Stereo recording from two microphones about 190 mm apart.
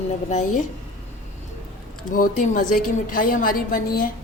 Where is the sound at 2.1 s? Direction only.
45° left (ahead or behind).